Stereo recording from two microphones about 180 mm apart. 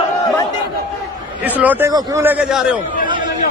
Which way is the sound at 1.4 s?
10° right (ahead or behind).